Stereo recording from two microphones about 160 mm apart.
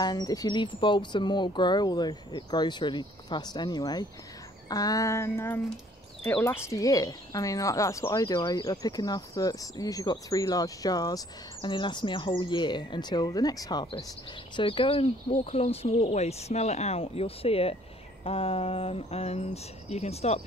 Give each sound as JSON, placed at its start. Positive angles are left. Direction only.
{"t": 0.0, "sound": "speech", "side_deg": 25}